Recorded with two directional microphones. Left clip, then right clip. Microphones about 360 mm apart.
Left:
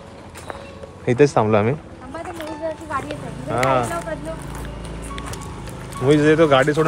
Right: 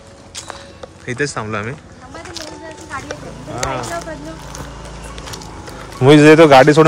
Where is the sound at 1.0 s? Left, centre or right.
Centre.